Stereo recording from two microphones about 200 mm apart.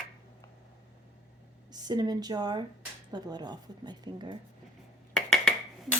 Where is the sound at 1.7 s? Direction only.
20° right (ahead or behind).